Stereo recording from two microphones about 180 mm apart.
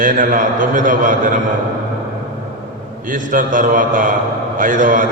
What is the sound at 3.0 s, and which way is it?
A man's voice, 50° right (ahead or behind).